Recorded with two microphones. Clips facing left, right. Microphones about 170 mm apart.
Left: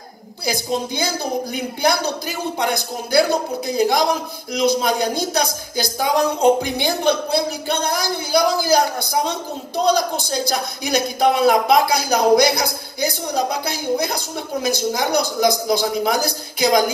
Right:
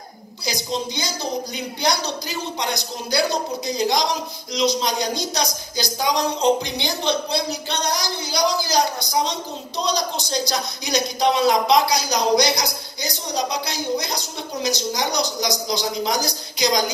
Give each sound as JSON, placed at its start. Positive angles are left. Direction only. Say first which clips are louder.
{"t": 0.5, "sound": "a man's voice", "louder": "left 4 dB", "side_deg": 55}
{"t": 14.8, "sound": "a man's voice", "louder": "left 4 dB", "side_deg": 55}